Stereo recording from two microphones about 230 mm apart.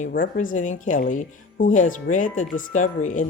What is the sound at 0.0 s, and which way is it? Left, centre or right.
Speech, left.